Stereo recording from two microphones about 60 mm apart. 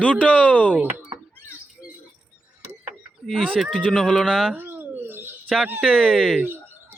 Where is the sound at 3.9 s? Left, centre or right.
Centre.